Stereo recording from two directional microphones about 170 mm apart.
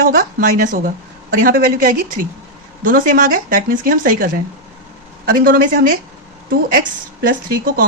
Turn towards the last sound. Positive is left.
turn(degrees=-55)  # may be behind; listen again after turning